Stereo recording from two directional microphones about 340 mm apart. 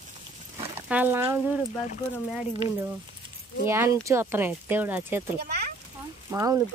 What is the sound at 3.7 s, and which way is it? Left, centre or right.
Speech, centre.